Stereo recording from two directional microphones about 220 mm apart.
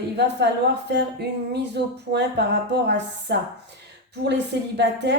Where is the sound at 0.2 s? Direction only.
50° right (ahead or behind).